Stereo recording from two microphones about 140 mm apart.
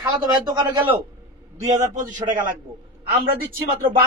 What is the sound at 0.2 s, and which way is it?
Speech, 25° right (ahead or behind).